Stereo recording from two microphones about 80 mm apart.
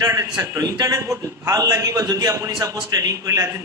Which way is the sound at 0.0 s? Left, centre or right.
Right.